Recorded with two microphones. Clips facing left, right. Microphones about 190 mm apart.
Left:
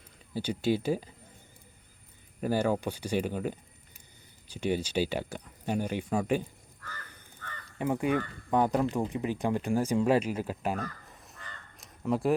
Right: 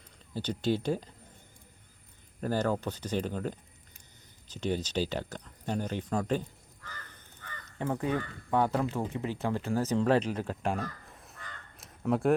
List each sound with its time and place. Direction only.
0.3 s speech: 10° left (ahead or behind)
2.4 s speech: 10° left (ahead or behind)
7.4 s crow: 15° right (ahead or behind)
7.8 s speech: 15° left (ahead or behind)